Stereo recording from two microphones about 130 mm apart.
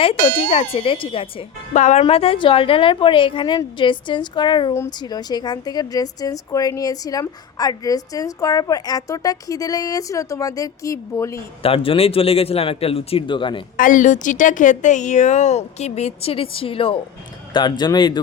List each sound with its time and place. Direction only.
0.0 s a man's voice: 50° left (ahead or behind)
1.7 s a woman's voice: 60° left (ahead or behind); by 11.3 s 25° left (ahead or behind)
11.6 s a man's voice: 45° left (ahead or behind)
13.7 s a woman's voice: 85° left; by 18.2 s 35° left (ahead or behind)